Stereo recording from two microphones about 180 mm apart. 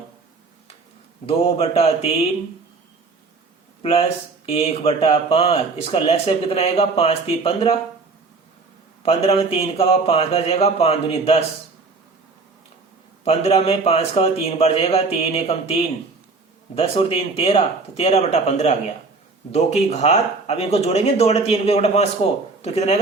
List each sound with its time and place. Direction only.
1.3 s speech: 35° left (ahead or behind)
4.4 s speech: 35° left (ahead or behind)
9.0 s speech: 35° left (ahead or behind)
13.2 s speech: 35° left (ahead or behind)